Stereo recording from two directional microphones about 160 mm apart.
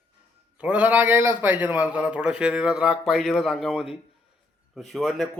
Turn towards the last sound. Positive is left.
turn(degrees=0)  # may be behind; listen again after turning